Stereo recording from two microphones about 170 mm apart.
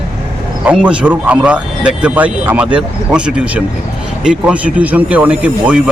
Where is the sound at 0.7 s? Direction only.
10° right (ahead or behind).